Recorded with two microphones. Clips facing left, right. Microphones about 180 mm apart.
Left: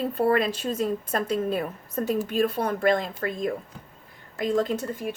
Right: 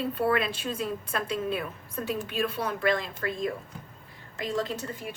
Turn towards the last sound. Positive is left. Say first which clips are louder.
# left 6 dB
turn(degrees=50)  # may be behind; listen again after turning